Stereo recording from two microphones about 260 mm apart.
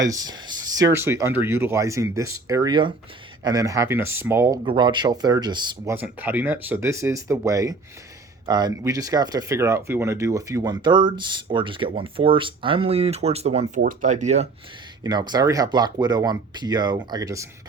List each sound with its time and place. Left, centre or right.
0.0 s speech: centre
15.0 s speech: centre